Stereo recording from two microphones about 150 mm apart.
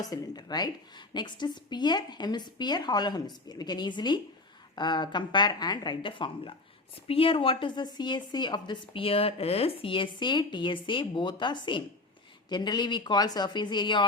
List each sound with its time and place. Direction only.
0.0 s a woman's voice: 25° left (ahead or behind)